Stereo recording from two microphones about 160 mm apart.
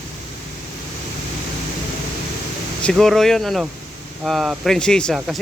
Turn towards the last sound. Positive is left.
turn(degrees=5)  # may be behind; listen again after turning